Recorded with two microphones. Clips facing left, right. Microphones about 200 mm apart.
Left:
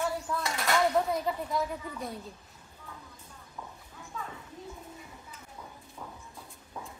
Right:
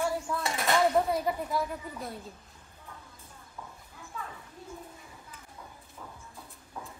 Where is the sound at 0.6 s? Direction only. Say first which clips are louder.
Right 2 dB; 20° right (ahead or behind).